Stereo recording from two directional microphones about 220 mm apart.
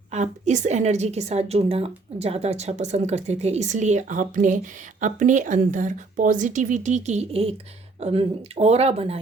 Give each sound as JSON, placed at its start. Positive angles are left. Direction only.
{"t": 0.1, "sound": "a woman's voice", "side_deg": -30}